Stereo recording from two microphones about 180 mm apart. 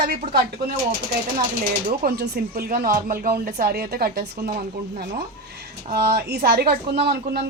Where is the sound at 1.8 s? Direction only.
60° right (ahead or behind).